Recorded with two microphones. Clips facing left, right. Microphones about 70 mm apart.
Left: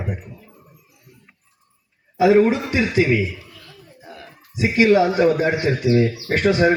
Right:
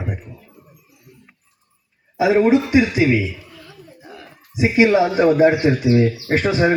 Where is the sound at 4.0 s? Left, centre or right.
Centre.